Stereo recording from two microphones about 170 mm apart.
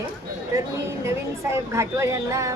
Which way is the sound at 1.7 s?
15° right (ahead or behind).